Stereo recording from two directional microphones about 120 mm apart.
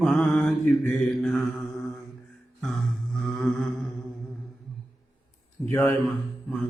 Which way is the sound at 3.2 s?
Centre (ahead or behind).